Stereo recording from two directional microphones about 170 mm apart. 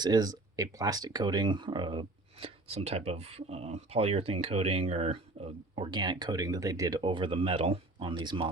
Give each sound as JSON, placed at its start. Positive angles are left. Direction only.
{"t": 0.0, "sound": "speech", "side_deg": -20}